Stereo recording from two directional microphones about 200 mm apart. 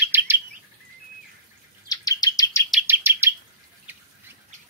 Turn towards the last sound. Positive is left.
turn(degrees=-10)  # may be behind; listen again after turning